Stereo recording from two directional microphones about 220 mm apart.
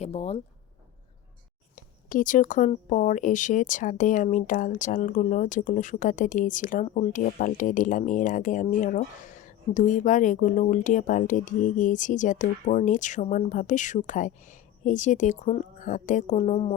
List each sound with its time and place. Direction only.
0.0 s speech: 30° left (ahead or behind)
1.7 s a woman's voice: 40° left (ahead or behind)